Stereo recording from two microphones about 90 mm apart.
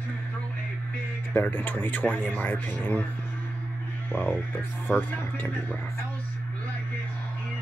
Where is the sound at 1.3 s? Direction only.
20° left (ahead or behind).